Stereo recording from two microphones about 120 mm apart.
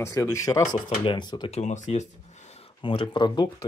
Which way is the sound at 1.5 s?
70° left (ahead or behind).